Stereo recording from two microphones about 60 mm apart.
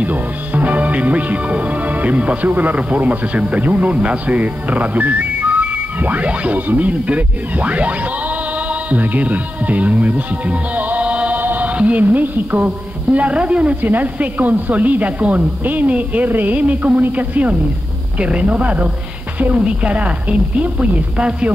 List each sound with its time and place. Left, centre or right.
0.0 s speech: right
8.9 s speech: right